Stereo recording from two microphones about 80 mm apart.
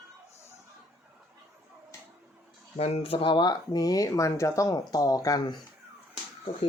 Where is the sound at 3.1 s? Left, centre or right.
Left.